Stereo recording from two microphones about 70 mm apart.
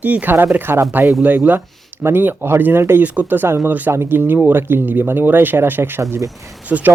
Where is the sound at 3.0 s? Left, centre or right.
Right.